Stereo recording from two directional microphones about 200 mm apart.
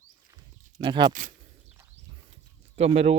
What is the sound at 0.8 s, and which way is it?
Speech, 25° right (ahead or behind).